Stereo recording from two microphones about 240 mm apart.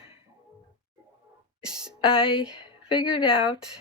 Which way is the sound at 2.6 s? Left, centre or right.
Left.